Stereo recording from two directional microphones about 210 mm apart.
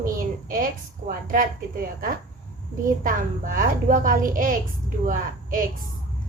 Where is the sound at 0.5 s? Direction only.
40° right (ahead or behind).